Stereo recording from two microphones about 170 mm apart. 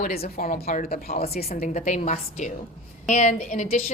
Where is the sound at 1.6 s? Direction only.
45° left (ahead or behind).